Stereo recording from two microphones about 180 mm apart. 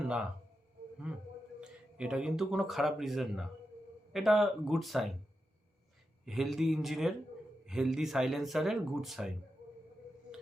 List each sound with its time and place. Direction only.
1.1 s speech: 5° right (ahead or behind)
6.2 s speech: centre (ahead or behind)